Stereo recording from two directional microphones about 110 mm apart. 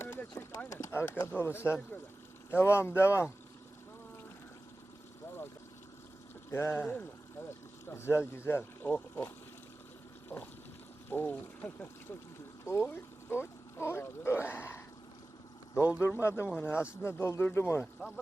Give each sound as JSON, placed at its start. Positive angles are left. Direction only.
{"t": 0.0, "sound": "speech", "side_deg": 25}
{"t": 6.5, "sound": "speech", "side_deg": 20}
{"t": 7.9, "sound": "speech", "side_deg": 25}
{"t": 10.2, "sound": "a sound", "side_deg": 20}
{"t": 11.1, "sound": "speech", "side_deg": 20}
{"t": 15.9, "sound": "speech", "side_deg": 25}